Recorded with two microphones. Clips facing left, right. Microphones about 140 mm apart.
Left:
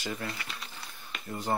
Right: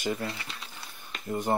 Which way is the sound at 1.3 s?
20° right (ahead or behind).